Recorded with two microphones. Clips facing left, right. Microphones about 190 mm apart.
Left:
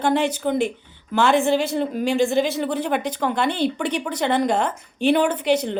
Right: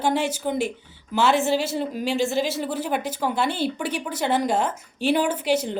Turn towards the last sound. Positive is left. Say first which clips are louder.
# left 2 dB
turn(degrees=-5)  # may be behind; listen again after turning